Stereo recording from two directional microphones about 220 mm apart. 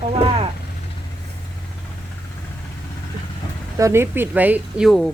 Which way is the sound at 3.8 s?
10° right (ahead or behind).